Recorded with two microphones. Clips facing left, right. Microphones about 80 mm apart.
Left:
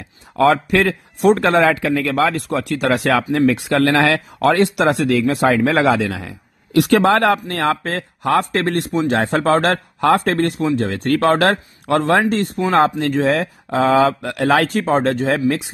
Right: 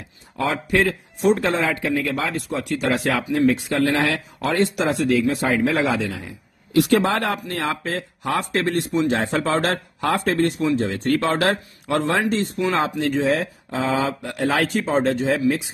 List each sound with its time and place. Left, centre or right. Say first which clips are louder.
0.4 s a man's voice: left 6 dB; left
4.4 s speech: left 6 dB; left